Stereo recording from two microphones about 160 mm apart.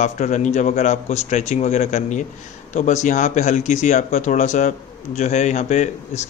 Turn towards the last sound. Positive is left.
turn(degrees=45)  # may be behind; listen again after turning